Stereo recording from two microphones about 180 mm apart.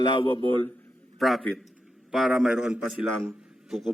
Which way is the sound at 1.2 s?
Centre (ahead or behind).